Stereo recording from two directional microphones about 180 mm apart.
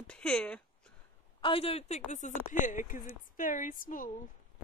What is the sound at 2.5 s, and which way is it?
A woman's voice, 45° left (ahead or behind).